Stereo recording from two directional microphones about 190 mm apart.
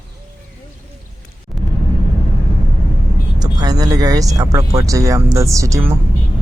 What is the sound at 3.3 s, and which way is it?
Speech, 20° right (ahead or behind).